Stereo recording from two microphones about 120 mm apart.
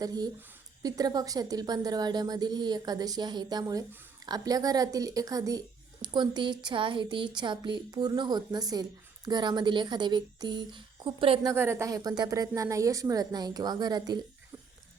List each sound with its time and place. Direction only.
0.0 s speech: 35° right (ahead or behind)
11.4 s speech: 20° right (ahead or behind)